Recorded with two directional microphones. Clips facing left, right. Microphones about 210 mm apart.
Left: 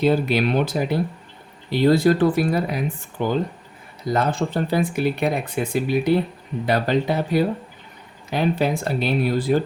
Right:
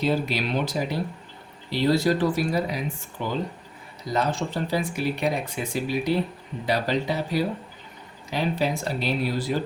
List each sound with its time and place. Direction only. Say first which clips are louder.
0.0 s speech: left 6 dB; 55° left (ahead or behind)